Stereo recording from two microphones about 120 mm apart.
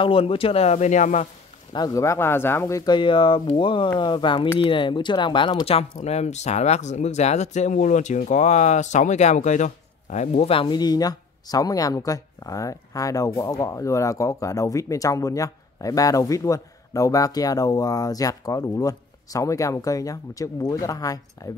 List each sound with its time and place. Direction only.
0.0 s speech: 50° left (ahead or behind); by 1.2 s 80° left
1.7 s speech: 30° left (ahead or behind)
2.8 s speech: 40° left (ahead or behind)
5.7 s speech: 60° left (ahead or behind); by 21.5 s 30° left (ahead or behind)